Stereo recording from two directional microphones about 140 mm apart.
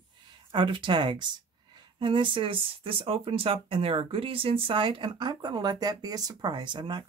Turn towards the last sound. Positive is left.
turn(degrees=-35)  # may be behind; listen again after turning